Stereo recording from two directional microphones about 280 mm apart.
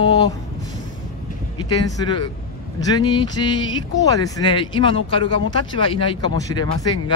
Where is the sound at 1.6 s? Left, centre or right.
Centre.